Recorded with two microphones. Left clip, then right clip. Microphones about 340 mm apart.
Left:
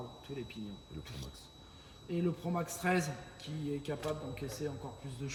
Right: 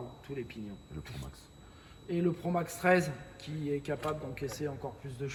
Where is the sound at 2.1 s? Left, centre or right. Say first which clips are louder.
Right 4 dB; centre.